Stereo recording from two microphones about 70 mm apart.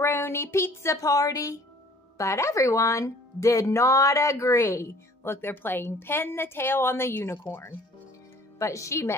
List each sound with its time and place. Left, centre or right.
0.0 s speech: left
8.5 s speech: left